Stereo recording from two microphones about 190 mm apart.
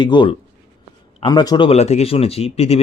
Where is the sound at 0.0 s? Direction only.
25° left (ahead or behind).